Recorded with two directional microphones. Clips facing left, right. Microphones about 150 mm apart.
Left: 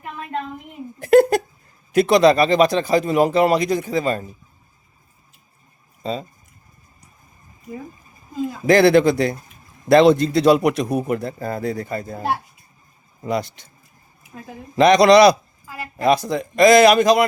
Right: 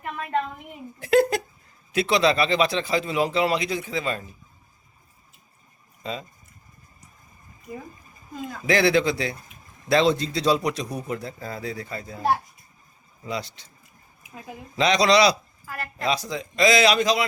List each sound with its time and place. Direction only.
0.9 s speech: 50° left (ahead or behind)
6.0 s speech: 35° left (ahead or behind)
8.6 s a man's voice: 50° left (ahead or behind)
13.2 s speech: 50° left (ahead or behind)
14.8 s speech: 55° left (ahead or behind)
15.6 s a woman's voice: 15° left (ahead or behind)
16.0 s speech: 50° left (ahead or behind)